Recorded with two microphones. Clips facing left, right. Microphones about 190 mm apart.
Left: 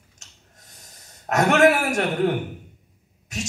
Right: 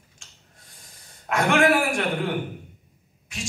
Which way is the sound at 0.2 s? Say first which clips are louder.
Left 2 dB; 40° left (ahead or behind).